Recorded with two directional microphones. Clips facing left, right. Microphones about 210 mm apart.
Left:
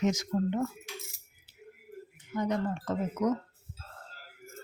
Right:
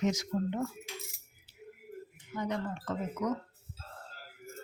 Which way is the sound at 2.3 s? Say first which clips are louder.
Left 4 dB; 45° left (ahead or behind).